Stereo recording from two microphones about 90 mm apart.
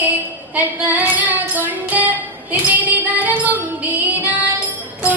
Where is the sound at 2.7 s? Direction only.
15° right (ahead or behind).